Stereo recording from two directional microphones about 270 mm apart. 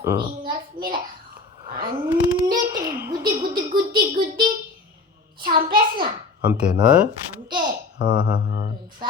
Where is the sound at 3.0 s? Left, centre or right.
Centre.